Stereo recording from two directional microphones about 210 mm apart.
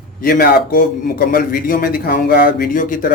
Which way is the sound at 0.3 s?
45° left (ahead or behind).